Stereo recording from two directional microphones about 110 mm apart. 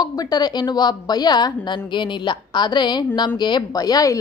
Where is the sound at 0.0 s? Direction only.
35° left (ahead or behind).